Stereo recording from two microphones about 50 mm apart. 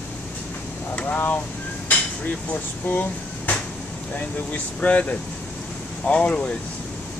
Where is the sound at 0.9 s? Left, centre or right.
Left.